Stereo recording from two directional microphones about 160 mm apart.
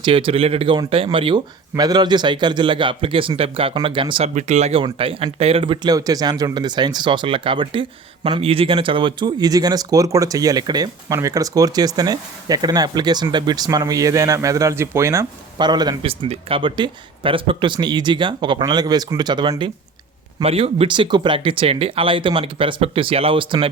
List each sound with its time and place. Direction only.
0.0 s speech: 35° right (ahead or behind)
4.4 s speech: 45° right (ahead or behind)